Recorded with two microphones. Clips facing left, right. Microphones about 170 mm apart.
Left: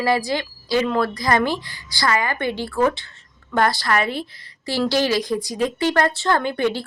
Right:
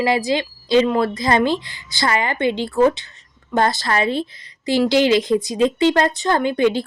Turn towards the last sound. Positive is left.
turn(degrees=-20)  # may be behind; listen again after turning